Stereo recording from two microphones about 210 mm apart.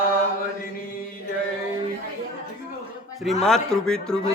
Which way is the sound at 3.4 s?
5° left (ahead or behind).